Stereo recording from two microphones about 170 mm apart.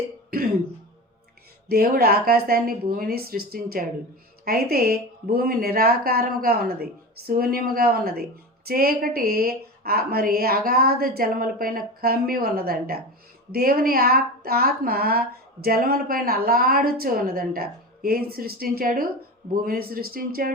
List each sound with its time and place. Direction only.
1.7 s speech: 65° right (ahead or behind)